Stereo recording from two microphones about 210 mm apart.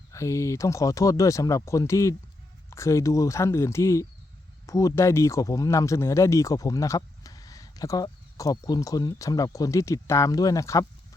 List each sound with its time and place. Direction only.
0.1 s speech: 15° left (ahead or behind)